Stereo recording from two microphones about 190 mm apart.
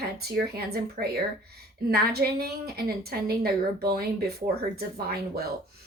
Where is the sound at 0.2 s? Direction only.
55° right (ahead or behind).